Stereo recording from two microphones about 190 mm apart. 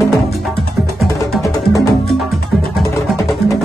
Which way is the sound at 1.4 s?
15° left (ahead or behind).